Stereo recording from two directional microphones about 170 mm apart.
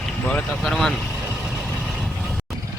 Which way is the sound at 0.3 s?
5° left (ahead or behind).